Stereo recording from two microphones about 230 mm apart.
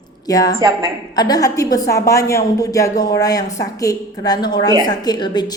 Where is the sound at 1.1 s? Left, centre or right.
Centre.